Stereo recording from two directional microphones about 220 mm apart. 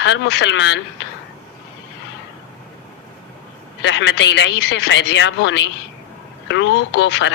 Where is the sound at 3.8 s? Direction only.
55° left (ahead or behind).